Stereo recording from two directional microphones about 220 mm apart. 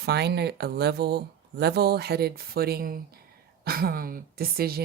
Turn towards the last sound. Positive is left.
turn(degrees=-45)  # may be behind; listen again after turning